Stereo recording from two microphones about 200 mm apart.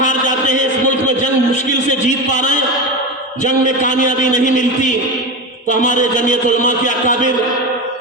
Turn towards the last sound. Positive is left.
turn(degrees=40)  # may be behind; listen again after turning